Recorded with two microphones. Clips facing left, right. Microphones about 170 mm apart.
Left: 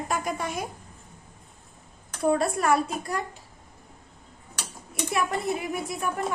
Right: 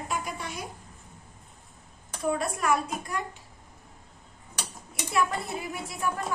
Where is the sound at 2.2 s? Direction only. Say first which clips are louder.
Left 5 dB; 35° left (ahead or behind).